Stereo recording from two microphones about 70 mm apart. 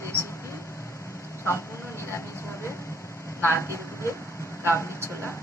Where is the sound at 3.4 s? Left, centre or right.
Left.